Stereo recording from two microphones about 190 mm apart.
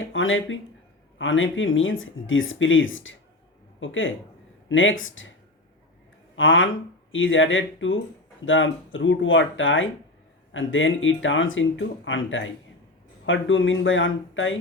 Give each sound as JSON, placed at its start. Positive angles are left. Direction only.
{"t": 0.1, "sound": "speech", "side_deg": 90}
{"t": 6.3, "sound": "speech", "side_deg": 90}